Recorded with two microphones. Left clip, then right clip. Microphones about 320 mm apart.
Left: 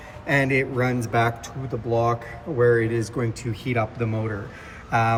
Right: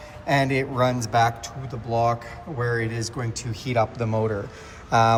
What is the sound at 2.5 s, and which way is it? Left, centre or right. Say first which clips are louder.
Speech: left 7 dB; centre.